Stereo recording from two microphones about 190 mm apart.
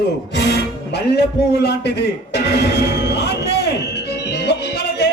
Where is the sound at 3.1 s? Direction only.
60° left (ahead or behind).